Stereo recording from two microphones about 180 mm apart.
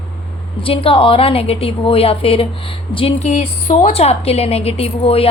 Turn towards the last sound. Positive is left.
turn(degrees=30)  # may be behind; listen again after turning